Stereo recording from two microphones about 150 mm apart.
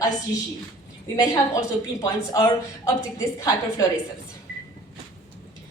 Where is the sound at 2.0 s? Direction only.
25° left (ahead or behind).